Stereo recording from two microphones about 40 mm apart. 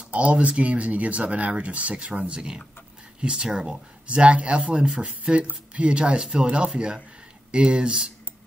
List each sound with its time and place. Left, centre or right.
0.1 s speech: right; by 3.8 s centre
4.1 s speech: right